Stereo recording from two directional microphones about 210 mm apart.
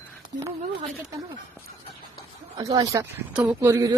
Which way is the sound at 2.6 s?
15° right (ahead or behind).